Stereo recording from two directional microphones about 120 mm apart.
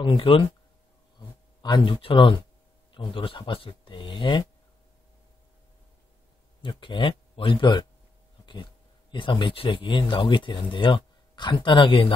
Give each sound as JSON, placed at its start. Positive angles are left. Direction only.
{"t": 0.0, "sound": "speech", "side_deg": 45}
{"t": 1.6, "sound": "speech", "side_deg": 40}
{"t": 6.6, "sound": "speech", "side_deg": 45}
{"t": 9.1, "sound": "speech", "side_deg": 45}